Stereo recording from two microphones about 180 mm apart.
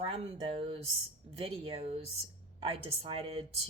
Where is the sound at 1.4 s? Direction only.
30° right (ahead or behind).